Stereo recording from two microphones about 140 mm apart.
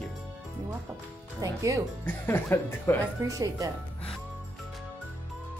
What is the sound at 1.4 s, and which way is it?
Speech, 25° right (ahead or behind).